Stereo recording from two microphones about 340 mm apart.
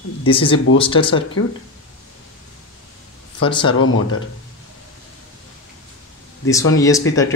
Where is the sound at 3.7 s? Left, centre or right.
Left.